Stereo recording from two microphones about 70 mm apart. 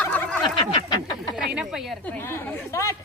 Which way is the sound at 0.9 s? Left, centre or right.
Left.